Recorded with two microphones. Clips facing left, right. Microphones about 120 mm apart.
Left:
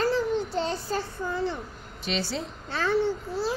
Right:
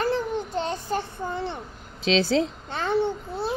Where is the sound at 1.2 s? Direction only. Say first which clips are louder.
Left 1 dB; 60° right (ahead or behind).